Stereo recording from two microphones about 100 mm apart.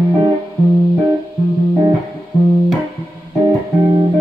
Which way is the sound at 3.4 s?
45° right (ahead or behind).